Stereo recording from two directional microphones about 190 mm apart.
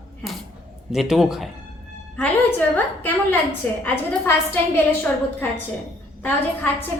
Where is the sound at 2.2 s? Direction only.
10° left (ahead or behind).